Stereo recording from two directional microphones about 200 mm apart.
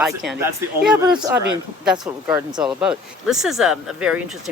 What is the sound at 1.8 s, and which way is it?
Speech, 5° right (ahead or behind).